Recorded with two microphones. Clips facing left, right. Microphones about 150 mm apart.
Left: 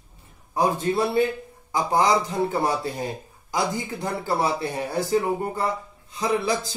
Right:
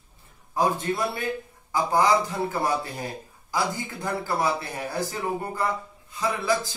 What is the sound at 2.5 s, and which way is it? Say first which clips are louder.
Speech: left 2 dB; 30° left (ahead or behind).